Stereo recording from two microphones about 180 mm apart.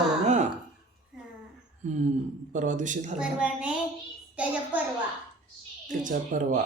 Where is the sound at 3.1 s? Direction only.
5° right (ahead or behind).